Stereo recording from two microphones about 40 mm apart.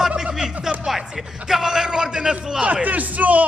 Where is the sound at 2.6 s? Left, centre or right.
Right.